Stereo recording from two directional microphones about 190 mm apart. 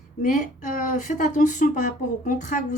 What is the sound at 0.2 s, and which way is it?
A woman's voice, 45° left (ahead or behind).